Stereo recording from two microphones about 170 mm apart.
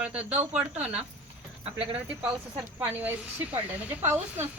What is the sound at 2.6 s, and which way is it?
Speech, 10° right (ahead or behind).